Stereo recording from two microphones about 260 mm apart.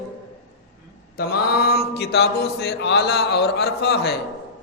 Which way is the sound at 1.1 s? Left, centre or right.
Left.